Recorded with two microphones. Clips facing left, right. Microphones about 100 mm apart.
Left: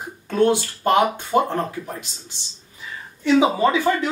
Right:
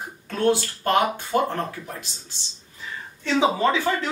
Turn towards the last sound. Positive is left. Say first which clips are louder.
# left 3 dB
turn(degrees=15)  # may be behind; listen again after turning